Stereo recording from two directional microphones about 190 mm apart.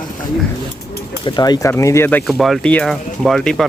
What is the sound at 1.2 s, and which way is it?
Speech, 20° left (ahead or behind).